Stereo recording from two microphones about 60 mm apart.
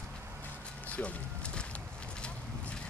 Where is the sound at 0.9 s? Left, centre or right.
Left.